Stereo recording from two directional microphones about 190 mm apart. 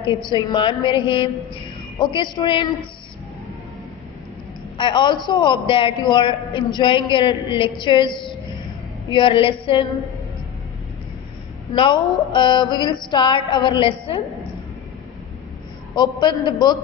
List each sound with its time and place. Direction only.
0.1 s a man's voice: 25° left (ahead or behind)
4.7 s a man's voice: 25° left (ahead or behind)
11.7 s a man's voice: 25° left (ahead or behind)
16.0 s a man's voice: 25° left (ahead or behind)